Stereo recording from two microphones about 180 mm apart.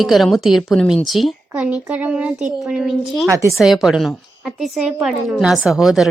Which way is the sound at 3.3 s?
15° right (ahead or behind).